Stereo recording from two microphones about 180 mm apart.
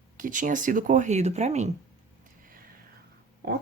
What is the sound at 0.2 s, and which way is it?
Speech, 45° right (ahead or behind).